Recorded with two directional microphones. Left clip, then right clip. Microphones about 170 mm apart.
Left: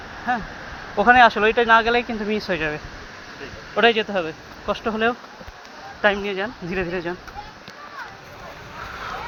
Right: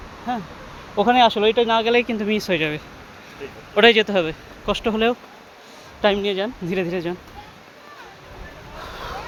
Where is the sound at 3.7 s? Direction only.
75° right (ahead or behind).